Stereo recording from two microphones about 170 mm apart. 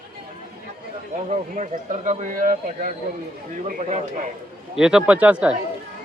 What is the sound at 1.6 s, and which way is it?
Speech, 45° right (ahead or behind).